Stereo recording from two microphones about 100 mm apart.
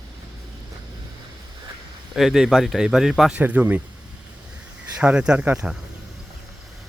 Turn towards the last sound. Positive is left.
turn(degrees=-15)  # may be behind; listen again after turning